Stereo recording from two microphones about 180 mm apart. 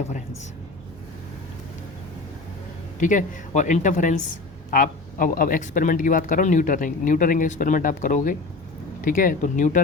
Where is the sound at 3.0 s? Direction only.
45° left (ahead or behind).